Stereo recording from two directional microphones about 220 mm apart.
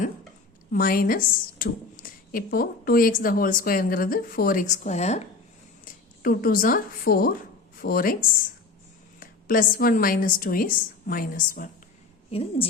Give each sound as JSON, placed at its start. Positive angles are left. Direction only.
{"t": 0.7, "sound": "a woman's voice", "side_deg": 40}
{"t": 9.2, "sound": "a woman's voice", "side_deg": 40}
{"t": 12.3, "sound": "a woman's voice", "side_deg": 25}